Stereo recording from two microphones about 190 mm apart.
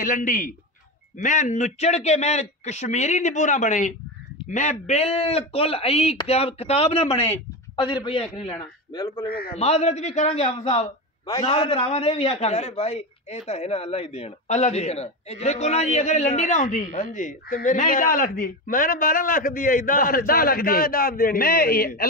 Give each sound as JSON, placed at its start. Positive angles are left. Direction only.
{"t": 0.0, "sound": "a man's voice", "side_deg": 45}
{"t": 9.6, "sound": "a man's voice", "side_deg": 35}
{"t": 11.2, "sound": "a man's voice", "side_deg": 20}